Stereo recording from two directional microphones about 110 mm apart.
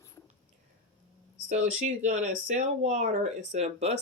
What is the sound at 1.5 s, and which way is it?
Speech, 90° right.